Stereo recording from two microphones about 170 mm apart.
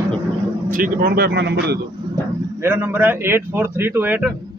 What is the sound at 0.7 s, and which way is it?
Speech, 60° right (ahead or behind).